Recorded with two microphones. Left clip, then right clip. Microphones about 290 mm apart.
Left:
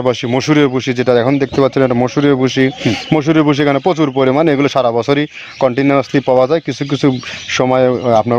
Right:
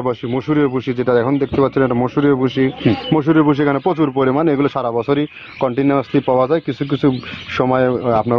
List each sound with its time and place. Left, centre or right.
0.0 s speech: left